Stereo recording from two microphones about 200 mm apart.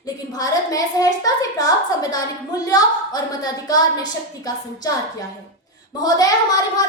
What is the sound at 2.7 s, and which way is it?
A woman's voice, 20° left (ahead or behind).